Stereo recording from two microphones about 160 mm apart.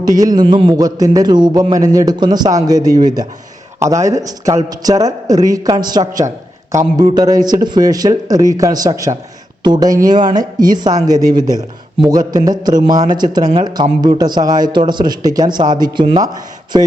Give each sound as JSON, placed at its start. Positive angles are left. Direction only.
{"t": 0.0, "sound": "speech", "side_deg": -25}